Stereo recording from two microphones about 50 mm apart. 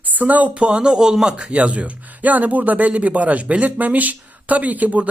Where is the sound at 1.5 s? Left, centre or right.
Right.